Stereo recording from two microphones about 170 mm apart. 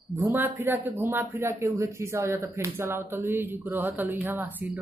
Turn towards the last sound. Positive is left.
turn(degrees=-10)  # may be behind; listen again after turning